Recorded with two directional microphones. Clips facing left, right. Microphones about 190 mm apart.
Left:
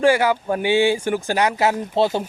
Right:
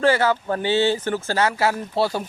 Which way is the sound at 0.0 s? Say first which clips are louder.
Left 2 dB; 10° left (ahead or behind).